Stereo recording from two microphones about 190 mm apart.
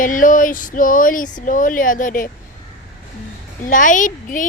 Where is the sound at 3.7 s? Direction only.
45° left (ahead or behind).